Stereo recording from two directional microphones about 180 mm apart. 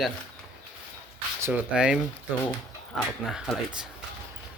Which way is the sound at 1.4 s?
5° right (ahead or behind).